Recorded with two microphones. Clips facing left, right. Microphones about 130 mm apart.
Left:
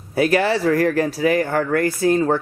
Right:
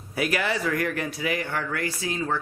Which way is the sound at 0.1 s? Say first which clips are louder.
Left 9 dB; 30° left (ahead or behind).